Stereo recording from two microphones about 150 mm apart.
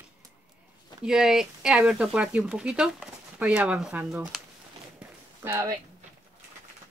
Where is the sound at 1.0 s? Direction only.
5° right (ahead or behind).